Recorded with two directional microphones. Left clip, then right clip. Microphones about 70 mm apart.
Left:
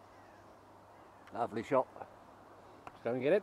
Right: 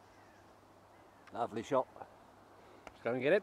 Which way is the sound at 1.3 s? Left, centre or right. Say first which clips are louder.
Left 1 dB; centre.